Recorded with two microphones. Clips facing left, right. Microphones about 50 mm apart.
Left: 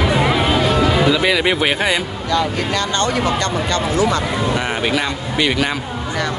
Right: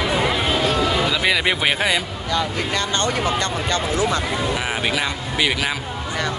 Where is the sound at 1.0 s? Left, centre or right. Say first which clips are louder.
Left 4 dB; centre.